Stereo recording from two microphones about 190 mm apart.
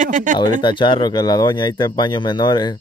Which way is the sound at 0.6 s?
25° left (ahead or behind).